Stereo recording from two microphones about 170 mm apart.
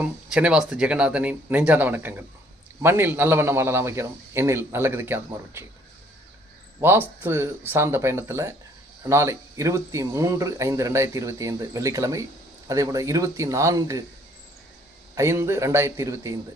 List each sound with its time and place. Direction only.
0.0 s speech: 5° right (ahead or behind)
6.8 s speech: 10° right (ahead or behind)
15.1 s speech: 15° right (ahead or behind)